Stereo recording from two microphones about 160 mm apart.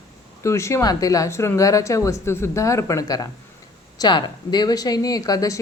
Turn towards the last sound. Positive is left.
turn(degrees=20)  # may be behind; listen again after turning